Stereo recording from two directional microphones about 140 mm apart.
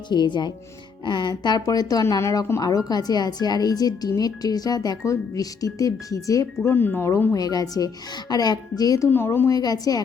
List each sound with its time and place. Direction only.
0.1 s speech: 30° left (ahead or behind); by 7.3 s 15° left (ahead or behind)
7.3 s speech: 25° left (ahead or behind)
9.1 s speech: 15° left (ahead or behind)